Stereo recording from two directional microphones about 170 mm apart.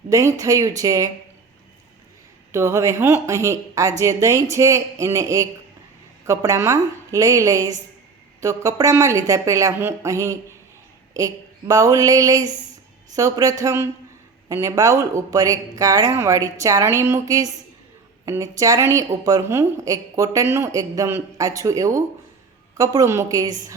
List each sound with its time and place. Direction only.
0.1 s a woman's voice: 20° right (ahead or behind)
2.5 s a woman's voice: 15° right (ahead or behind)